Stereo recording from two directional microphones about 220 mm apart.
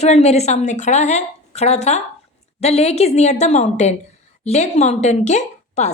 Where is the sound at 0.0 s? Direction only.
30° left (ahead or behind).